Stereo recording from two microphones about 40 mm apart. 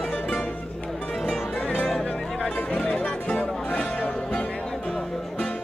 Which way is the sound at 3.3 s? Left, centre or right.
Left.